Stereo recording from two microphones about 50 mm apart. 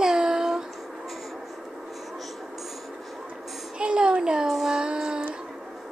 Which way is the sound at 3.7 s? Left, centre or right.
Centre.